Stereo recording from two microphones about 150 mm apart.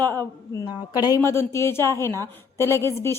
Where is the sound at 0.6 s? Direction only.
25° left (ahead or behind).